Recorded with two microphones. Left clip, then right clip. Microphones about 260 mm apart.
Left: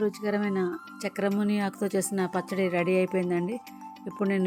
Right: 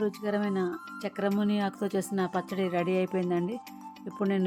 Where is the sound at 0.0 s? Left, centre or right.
Centre.